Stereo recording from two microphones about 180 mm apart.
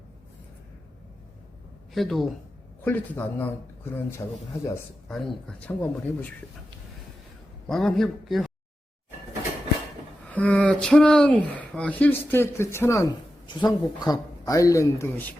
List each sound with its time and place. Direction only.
1.9 s speech: centre (ahead or behind)
7.7 s a man's voice: centre (ahead or behind)
10.2 s speech: 10° left (ahead or behind)